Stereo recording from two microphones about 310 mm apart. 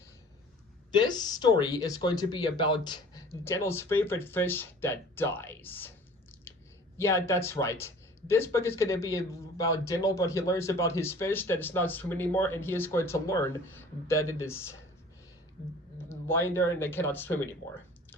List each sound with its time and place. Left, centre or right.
0.9 s speech: centre
6.5 s a sound: centre
6.9 s speech: centre
16.0 s speech: centre